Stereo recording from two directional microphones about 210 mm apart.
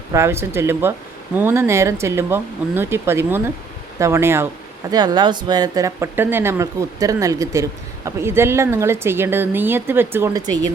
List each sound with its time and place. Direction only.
0.1 s speech: 10° right (ahead or behind)